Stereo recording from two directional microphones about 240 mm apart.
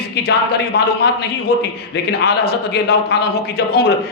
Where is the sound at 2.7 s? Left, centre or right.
Left.